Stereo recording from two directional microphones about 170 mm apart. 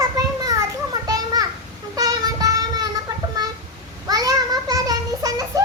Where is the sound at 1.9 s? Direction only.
20° right (ahead or behind).